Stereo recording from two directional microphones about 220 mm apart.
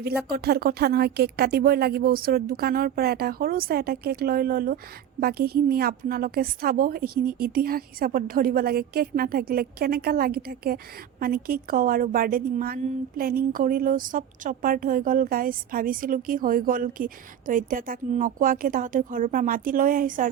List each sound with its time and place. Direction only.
0.0 s a woman's voice: 45° right (ahead or behind)